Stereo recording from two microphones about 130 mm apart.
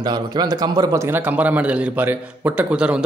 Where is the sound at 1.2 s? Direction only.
10° right (ahead or behind).